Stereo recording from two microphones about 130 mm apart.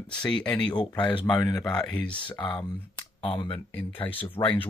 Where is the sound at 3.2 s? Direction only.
45° left (ahead or behind).